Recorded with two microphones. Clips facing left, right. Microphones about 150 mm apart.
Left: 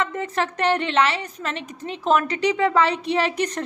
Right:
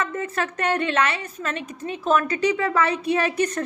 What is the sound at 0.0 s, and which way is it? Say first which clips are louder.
A woman's voice: left 2 dB; 20° left (ahead or behind).